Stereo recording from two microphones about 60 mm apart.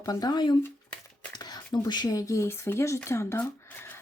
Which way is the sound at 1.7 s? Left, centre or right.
Left.